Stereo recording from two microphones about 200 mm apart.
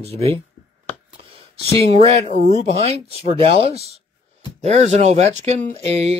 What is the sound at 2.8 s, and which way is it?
Speech, 30° right (ahead or behind).